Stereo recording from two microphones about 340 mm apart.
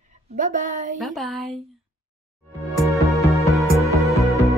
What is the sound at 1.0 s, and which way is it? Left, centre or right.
Speech, centre.